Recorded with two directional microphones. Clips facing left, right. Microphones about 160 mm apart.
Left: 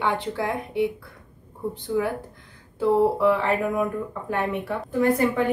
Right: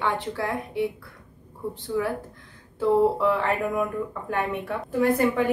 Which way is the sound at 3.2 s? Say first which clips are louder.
Left 2 dB; centre (ahead or behind).